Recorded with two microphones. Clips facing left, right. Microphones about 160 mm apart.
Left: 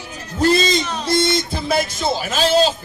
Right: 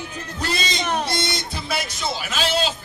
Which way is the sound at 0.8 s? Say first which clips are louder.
Right 3 dB; 55° right (ahead or behind).